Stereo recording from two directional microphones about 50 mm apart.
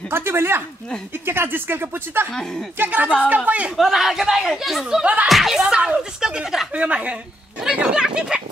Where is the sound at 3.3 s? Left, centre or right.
Right.